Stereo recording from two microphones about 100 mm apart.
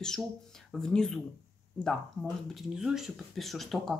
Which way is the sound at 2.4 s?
5° right (ahead or behind).